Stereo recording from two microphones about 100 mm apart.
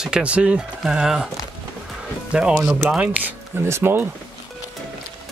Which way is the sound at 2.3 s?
5° right (ahead or behind).